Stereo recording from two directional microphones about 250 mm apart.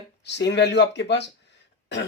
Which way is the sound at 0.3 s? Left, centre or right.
Left.